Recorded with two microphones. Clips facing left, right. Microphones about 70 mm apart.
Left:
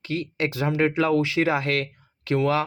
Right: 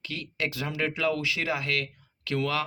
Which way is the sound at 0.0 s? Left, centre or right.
Left.